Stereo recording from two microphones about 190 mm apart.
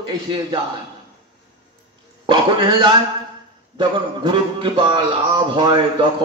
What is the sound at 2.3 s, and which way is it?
A man's voice, 25° right (ahead or behind).